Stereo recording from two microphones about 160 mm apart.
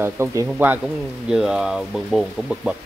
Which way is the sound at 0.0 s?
15° right (ahead or behind).